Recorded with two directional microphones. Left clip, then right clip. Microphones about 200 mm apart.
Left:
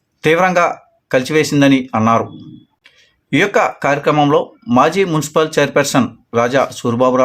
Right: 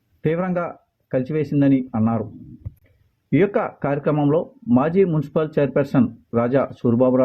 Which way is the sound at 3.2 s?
5° right (ahead or behind).